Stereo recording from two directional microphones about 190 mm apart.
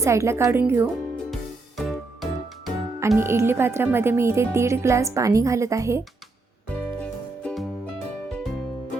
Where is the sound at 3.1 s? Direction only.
15° right (ahead or behind).